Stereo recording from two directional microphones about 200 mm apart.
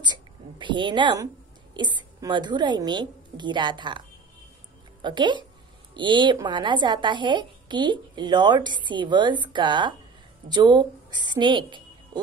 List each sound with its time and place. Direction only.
0.0 s a woman's voice: 25° right (ahead or behind)
5.0 s a woman's voice: 25° right (ahead or behind)